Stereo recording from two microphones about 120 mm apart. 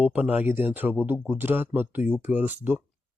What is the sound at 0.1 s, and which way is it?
Speech, 10° right (ahead or behind).